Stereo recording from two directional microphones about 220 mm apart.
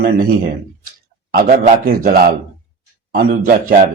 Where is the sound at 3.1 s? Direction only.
40° right (ahead or behind).